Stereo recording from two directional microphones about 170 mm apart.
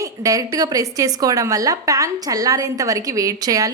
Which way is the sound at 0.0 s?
20° right (ahead or behind).